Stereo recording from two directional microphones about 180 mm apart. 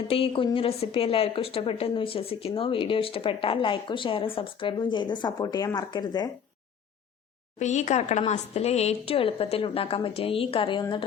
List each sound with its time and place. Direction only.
0.1 s a woman's voice: 30° left (ahead or behind)
7.6 s a woman's voice: 40° left (ahead or behind)